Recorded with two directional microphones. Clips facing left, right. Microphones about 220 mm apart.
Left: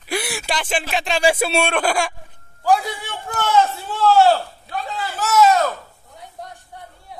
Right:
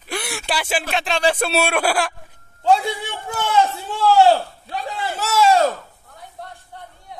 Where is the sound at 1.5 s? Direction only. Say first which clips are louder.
Even; 5° right (ahead or behind).